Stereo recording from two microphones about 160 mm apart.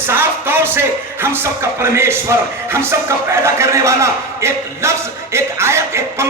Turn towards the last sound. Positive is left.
turn(degrees=-15)  # may be behind; listen again after turning